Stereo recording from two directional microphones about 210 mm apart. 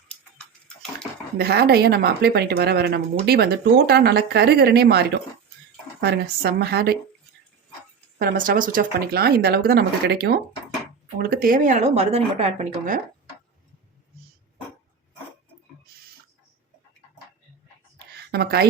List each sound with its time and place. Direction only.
0.1 s bathtub: 5° left (ahead or behind)
1.4 s speech: 50° right (ahead or behind)
8.2 s speech: 40° right (ahead or behind)
18.3 s a woman's voice: 50° right (ahead or behind)